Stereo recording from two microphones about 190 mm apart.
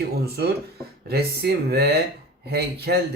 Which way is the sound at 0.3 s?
55° right (ahead or behind).